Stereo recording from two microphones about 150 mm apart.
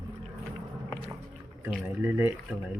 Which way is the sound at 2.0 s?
15° right (ahead or behind).